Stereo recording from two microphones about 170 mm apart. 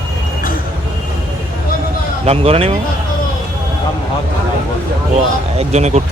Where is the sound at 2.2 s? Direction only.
35° right (ahead or behind).